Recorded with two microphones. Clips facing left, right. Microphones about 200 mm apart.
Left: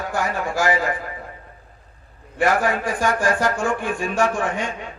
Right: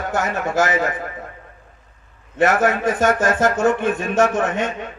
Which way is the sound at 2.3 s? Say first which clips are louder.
Right 3 dB; 20° right (ahead or behind).